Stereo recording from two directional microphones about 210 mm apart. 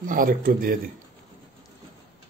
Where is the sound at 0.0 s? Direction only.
40° right (ahead or behind).